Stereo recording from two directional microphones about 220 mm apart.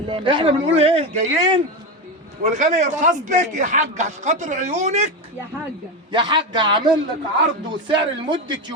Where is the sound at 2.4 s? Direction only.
35° right (ahead or behind).